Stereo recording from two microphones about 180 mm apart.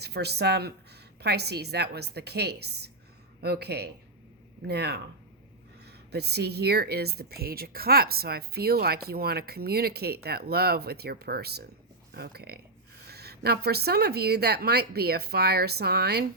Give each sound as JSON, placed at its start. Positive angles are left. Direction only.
{"t": 0.0, "sound": "speech", "side_deg": -65}